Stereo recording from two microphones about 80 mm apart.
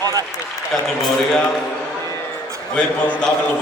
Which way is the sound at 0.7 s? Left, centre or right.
Centre.